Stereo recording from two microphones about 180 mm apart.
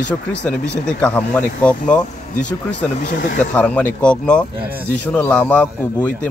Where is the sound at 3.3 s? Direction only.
5° left (ahead or behind).